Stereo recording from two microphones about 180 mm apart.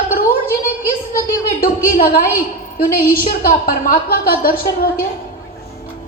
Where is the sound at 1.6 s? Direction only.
55° left (ahead or behind).